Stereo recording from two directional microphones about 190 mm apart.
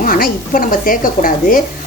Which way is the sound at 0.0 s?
50° left (ahead or behind).